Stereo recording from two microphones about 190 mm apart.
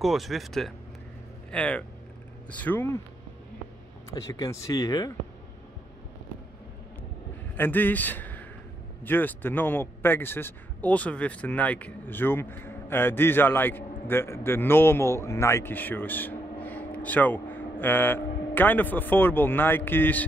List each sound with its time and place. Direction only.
0.0 s speech: centre (ahead or behind)
4.1 s speech: 20° left (ahead or behind)
7.5 s a man's voice: 10° left (ahead or behind)